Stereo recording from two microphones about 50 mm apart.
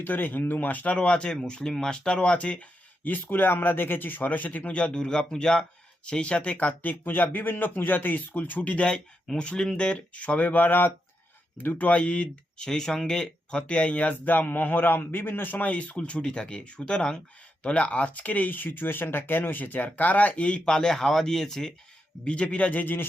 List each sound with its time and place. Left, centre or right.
0.0 s a man's voice: left
0.9 s a man's voice: left
11.7 s speech: left
12.6 s a man's voice: centre; by 15.7 s left
15.7 s a man's voice: left
20.7 s speech: centre
22.2 s speech: left